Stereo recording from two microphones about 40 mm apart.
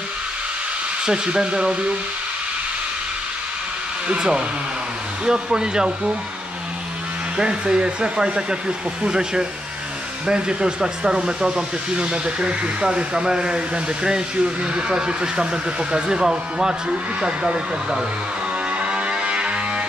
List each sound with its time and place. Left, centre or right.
1.0 s speech: right
4.2 s speech: right
7.3 s speech: right
18.8 s music: right